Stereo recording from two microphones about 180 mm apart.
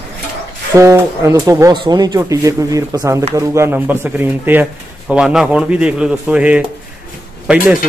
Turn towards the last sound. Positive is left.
turn(degrees=-5)  # may be behind; listen again after turning